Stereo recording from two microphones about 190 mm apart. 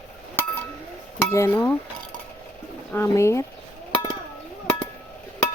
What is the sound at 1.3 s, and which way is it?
Dishes, 10° left (ahead or behind).